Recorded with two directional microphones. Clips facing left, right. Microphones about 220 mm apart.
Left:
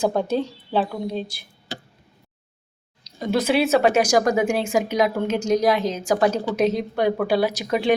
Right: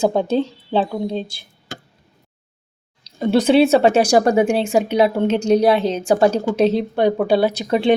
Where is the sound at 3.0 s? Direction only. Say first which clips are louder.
Right 6 dB; 25° right (ahead or behind).